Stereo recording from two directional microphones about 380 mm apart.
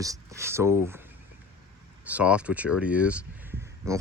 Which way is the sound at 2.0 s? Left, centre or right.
Centre.